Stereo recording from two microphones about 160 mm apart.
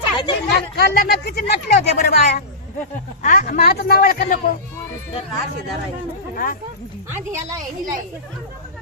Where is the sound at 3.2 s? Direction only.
55° left (ahead or behind).